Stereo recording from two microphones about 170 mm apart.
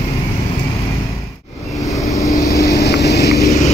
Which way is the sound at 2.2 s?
20° left (ahead or behind).